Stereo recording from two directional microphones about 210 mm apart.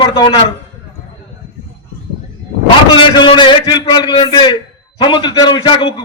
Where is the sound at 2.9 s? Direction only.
20° left (ahead or behind).